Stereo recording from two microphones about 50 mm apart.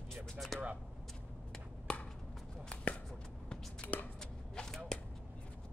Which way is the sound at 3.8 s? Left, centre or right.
Left.